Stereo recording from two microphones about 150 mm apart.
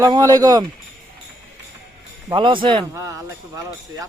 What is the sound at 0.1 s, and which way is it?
Speech, 25° right (ahead or behind).